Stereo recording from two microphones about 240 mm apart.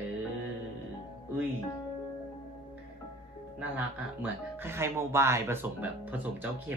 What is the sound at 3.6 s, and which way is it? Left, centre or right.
Speech, centre.